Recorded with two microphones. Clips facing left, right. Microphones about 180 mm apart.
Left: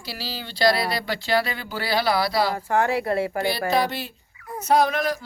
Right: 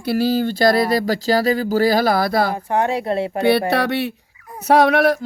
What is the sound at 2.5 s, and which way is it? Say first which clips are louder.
Speech: right 2 dB; 20° right (ahead or behind).